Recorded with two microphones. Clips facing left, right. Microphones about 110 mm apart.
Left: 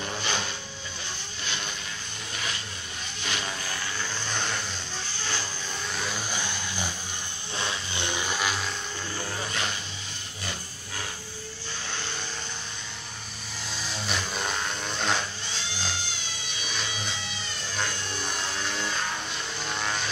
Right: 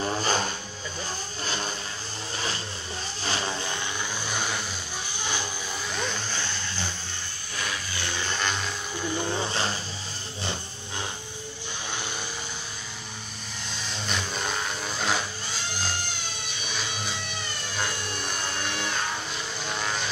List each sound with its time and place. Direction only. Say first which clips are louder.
0.0 s vehicle: right 5 dB; 40° right (ahead or behind)
3.2 s vehicle: right 3 dB; 35° right (ahead or behind)
4.3 s vehicle: right 1 dB; 10° right (ahead or behind)
6.1 s vehicle: even; 15° left (ahead or behind)
7.5 s vehicle: left 1 dB; 25° left (ahead or behind); by 8.7 s 5° left (ahead or behind)
9.5 s vehicle: right 3 dB; 30° right (ahead or behind)
13.7 s vehicle: even; centre (ahead or behind)
16.6 s music: right 1 dB; centre (ahead or behind)
19.6 s vehicle: even; centre (ahead or behind)